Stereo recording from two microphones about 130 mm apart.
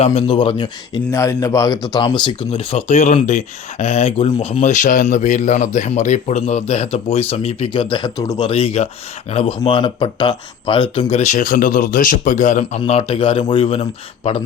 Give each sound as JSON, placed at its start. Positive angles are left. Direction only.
{"t": 0.0, "sound": "speech", "side_deg": 55}
{"t": 1.1, "sound": "speech", "side_deg": 25}
{"t": 4.7, "sound": "speech", "side_deg": 85}
{"t": 8.2, "sound": "speech", "side_deg": 25}
{"t": 8.4, "sound": "a man's voice", "side_deg": 45}
{"t": 12.8, "sound": "a man's voice", "side_deg": 45}